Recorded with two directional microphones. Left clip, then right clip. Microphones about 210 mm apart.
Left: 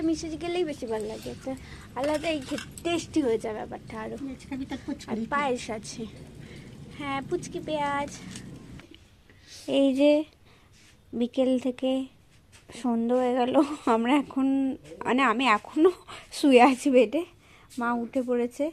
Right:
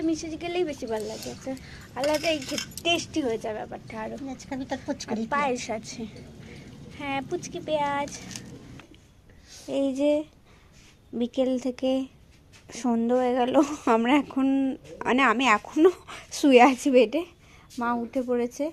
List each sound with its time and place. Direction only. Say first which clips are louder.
0.0 s a woman's voice: even; 5° left (ahead or behind)
3.1 s a woman's voice: left 2 dB; 15° left (ahead or behind)
4.4 s speech: right 6 dB; 45° right (ahead or behind)
4.8 s a woman's voice: right 3 dB; 5° left (ahead or behind)
9.6 s speech: left 3 dB; 20° left (ahead or behind)
11.1 s a woman's voice: left 1 dB; 5° left (ahead or behind)